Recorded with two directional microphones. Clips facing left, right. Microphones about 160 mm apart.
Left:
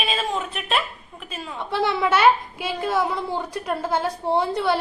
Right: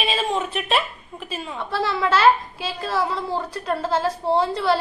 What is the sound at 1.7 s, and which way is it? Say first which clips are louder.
A woman's voice: left 1 dB; 20° left (ahead or behind).